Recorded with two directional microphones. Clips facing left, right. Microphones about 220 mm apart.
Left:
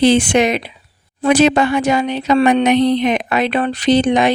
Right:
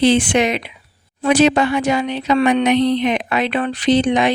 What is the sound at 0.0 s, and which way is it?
Speech, 40° left (ahead or behind).